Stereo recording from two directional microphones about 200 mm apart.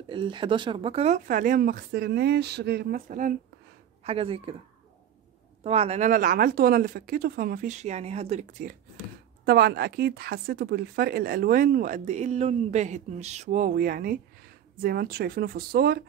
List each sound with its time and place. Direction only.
0.1 s speech: 25° right (ahead or behind); by 3.3 s 40° right (ahead or behind)
4.0 s speech: 30° right (ahead or behind)
5.6 s speech: 30° right (ahead or behind)
9.4 s speech: 55° right (ahead or behind)